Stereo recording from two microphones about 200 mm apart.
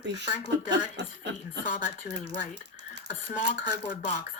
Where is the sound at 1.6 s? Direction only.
40° left (ahead or behind).